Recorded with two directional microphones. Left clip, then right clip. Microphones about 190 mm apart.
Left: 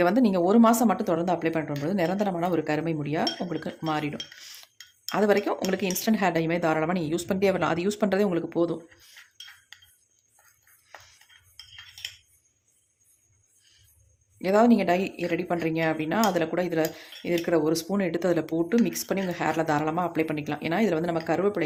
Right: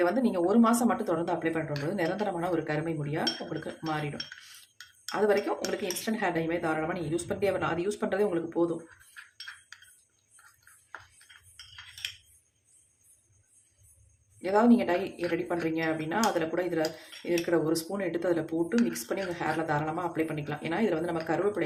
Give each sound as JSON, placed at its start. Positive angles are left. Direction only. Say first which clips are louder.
{"t": 0.0, "sound": "speech", "louder": "left 4 dB", "side_deg": 40}
{"t": 5.1, "sound": "speech", "louder": "left 3 dB", "side_deg": 40}
{"t": 14.4, "sound": "speech", "louder": "left 4 dB", "side_deg": 40}